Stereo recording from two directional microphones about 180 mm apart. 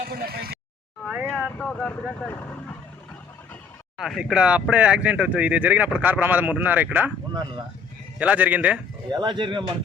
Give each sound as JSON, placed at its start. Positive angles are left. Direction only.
{"t": 0.1, "sound": "speech", "side_deg": -60}
{"t": 1.3, "sound": "speech", "side_deg": 5}
{"t": 3.9, "sound": "speech", "side_deg": 0}
{"t": 8.2, "sound": "speech", "side_deg": -10}
{"t": 9.0, "sound": "speech", "side_deg": -25}